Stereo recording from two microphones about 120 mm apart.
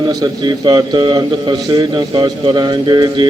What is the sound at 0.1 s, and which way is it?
A man's voice, 35° right (ahead or behind).